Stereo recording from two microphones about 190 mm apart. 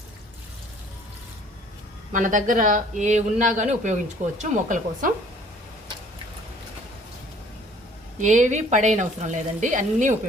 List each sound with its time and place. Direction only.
2.1 s speech: 45° right (ahead or behind)
8.2 s speech: 40° right (ahead or behind)